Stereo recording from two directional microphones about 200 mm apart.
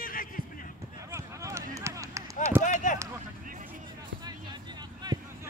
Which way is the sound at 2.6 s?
40° left (ahead or behind).